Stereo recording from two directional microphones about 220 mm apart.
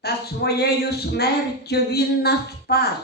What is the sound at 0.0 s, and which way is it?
A woman's voice, 45° left (ahead or behind).